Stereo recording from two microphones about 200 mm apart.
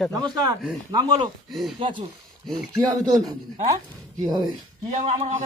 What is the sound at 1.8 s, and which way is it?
Speech, 25° right (ahead or behind).